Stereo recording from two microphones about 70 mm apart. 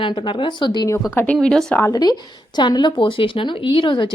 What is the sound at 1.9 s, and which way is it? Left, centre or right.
A woman's voice, left.